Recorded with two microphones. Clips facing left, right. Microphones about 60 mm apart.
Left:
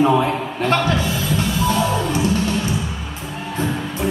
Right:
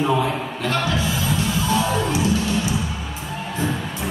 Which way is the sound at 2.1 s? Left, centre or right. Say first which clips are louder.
Left 1 dB; left.